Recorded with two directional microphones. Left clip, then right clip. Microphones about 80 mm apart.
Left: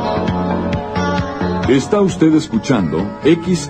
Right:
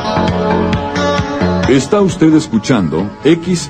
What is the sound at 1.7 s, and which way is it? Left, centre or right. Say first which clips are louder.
A man's voice: right 2 dB; right.